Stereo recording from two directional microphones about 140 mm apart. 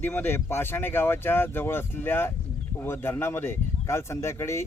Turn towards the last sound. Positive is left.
turn(degrees=20)  # may be behind; listen again after turning